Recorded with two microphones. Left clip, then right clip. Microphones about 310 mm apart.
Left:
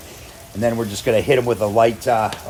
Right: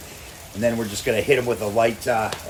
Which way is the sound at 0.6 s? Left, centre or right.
Left.